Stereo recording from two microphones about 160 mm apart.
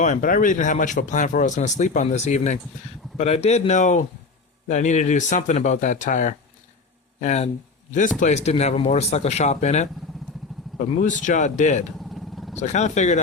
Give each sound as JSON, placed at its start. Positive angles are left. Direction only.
{"t": 0.0, "sound": "a man's voice", "side_deg": 55}
{"t": 11.9, "sound": "vehicle", "side_deg": 0}
{"t": 12.5, "sound": "speech", "side_deg": 45}